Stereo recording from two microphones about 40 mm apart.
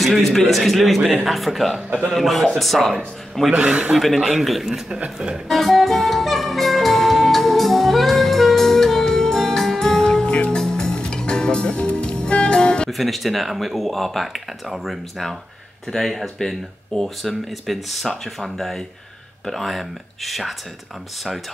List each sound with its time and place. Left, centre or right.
0.0 s speech: centre
1.9 s a man's voice: right
2.1 s speech: centre
3.5 s a man's voice: right
4.0 s speech: centre
4.6 s a man's voice: centre
5.5 s music: centre
11.7 s music: left
12.9 s speech: centre